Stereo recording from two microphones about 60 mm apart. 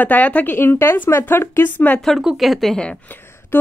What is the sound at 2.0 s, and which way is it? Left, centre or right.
Speech, centre.